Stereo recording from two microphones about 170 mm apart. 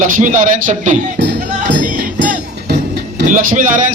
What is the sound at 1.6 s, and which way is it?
Music, 50° right (ahead or behind).